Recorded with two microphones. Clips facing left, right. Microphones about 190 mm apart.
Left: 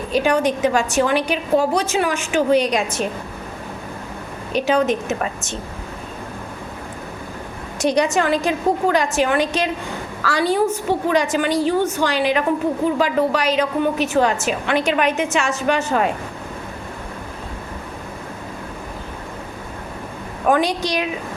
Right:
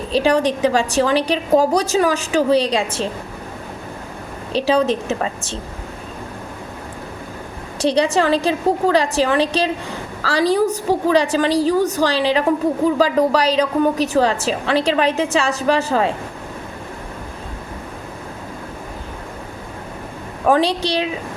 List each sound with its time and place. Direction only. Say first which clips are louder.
0.1 s a woman's voice: right 2 dB; 35° right (ahead or behind)
4.5 s a woman's voice: right 1 dB; 30° right (ahead or behind)
7.8 s a woman's voice: right 1 dB; 30° right (ahead or behind)
20.5 s a woman's voice: right 2 dB; 30° right (ahead or behind)